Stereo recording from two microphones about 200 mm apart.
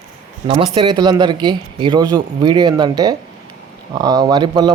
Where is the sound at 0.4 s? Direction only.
25° right (ahead or behind).